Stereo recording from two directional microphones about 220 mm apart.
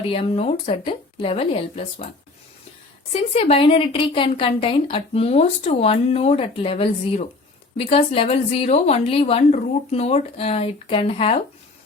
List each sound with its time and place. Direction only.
0.1 s a woman's voice: 25° left (ahead or behind)
3.1 s a woman's voice: 25° left (ahead or behind)